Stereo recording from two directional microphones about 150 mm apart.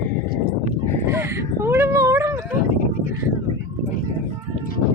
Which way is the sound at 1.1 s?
15° right (ahead or behind).